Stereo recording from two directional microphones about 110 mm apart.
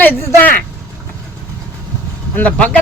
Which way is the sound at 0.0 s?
20° left (ahead or behind).